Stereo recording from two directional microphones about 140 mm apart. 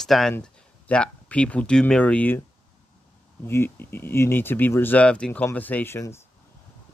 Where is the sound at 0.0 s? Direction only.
Centre (ahead or behind).